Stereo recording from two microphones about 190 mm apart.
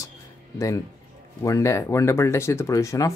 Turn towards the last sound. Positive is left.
turn(degrees=15)  # may be behind; listen again after turning